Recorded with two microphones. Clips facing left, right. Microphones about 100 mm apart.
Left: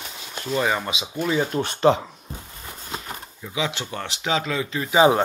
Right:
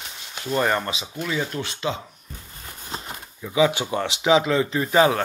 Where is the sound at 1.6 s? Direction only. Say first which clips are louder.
Left 10 dB; 55° left (ahead or behind).